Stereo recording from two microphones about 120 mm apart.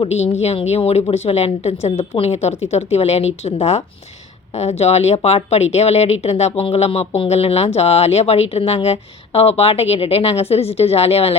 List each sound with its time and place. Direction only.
0.0 s a woman's voice: 60° left (ahead or behind)